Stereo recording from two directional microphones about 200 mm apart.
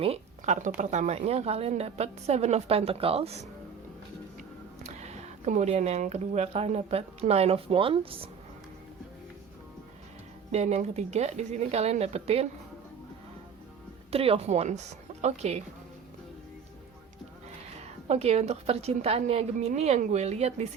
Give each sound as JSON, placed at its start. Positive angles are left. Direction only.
{"t": 0.0, "sound": "a woman's voice", "side_deg": -35}
{"t": 4.8, "sound": "speech", "side_deg": -35}
{"t": 10.5, "sound": "a woman's voice", "side_deg": -35}
{"t": 14.1, "sound": "a woman's voice", "side_deg": -30}
{"t": 18.1, "sound": "a woman's voice", "side_deg": -30}